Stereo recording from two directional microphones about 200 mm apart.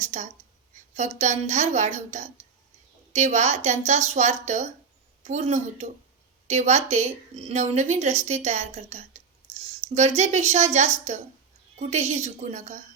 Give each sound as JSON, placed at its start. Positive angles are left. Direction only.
{"t": 0.0, "sound": "a woman's voice", "side_deg": -35}